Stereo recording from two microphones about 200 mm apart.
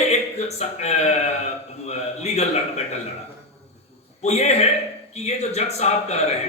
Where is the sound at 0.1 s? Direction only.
35° left (ahead or behind).